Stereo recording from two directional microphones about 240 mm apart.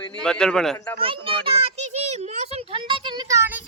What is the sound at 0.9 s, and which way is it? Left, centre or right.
Speech, right.